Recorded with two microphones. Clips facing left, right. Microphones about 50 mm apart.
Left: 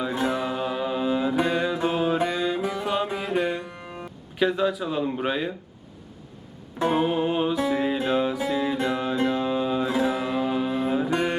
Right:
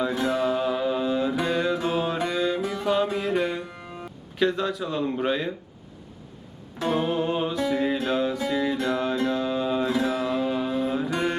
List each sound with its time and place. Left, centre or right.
0.1 s music: left; by 3.6 s centre
4.0 s speech: centre
6.7 s music: left
7.0 s music: centre
9.9 s music: centre
10.9 s music: centre